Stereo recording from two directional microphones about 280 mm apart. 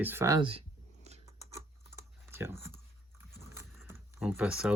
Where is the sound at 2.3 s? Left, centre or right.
Centre.